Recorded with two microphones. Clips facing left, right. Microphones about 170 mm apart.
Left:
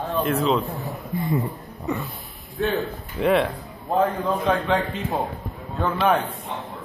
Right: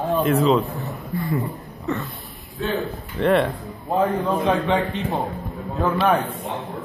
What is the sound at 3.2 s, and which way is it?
Speech, centre (ahead or behind).